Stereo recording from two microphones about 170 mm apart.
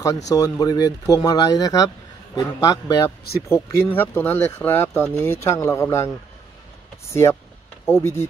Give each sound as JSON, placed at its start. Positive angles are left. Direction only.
{"t": 0.3, "sound": "speech", "side_deg": 20}